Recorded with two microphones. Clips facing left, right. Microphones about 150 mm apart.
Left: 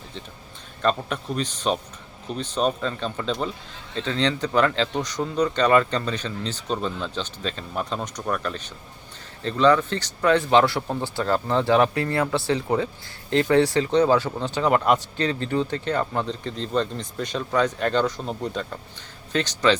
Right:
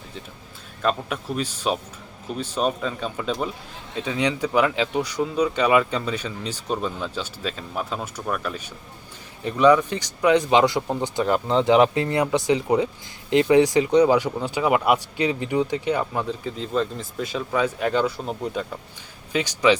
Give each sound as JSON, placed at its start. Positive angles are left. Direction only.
{"t": 0.8, "sound": "speech", "side_deg": -5}